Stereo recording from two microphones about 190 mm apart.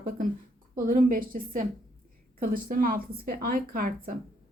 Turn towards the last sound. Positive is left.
turn(degrees=-45)  # may be behind; listen again after turning